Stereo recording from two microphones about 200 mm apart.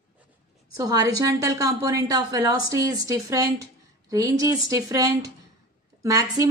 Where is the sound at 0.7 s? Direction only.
20° right (ahead or behind).